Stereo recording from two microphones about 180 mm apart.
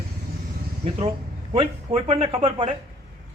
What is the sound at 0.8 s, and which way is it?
Speech, 30° right (ahead or behind).